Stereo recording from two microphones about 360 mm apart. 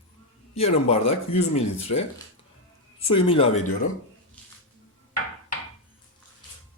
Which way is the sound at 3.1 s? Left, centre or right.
Centre.